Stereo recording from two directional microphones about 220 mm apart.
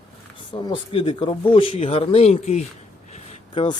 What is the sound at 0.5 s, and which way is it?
Speech, 20° left (ahead or behind).